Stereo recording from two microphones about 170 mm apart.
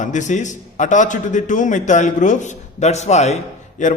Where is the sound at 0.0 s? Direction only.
45° left (ahead or behind).